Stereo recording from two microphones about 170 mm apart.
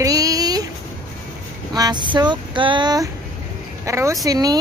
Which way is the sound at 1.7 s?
25° right (ahead or behind).